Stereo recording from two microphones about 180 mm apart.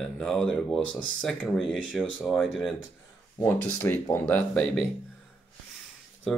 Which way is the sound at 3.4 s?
15° left (ahead or behind).